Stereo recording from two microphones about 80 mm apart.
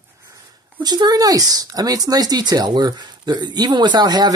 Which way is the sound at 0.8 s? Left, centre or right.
Right.